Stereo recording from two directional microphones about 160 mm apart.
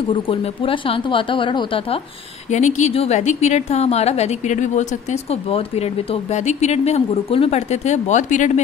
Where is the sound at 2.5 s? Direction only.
45° left (ahead or behind).